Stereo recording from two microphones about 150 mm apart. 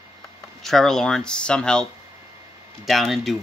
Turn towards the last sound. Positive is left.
turn(degrees=0)  # may be behind; listen again after turning